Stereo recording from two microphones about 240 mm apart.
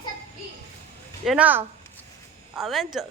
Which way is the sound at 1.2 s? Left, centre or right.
Centre.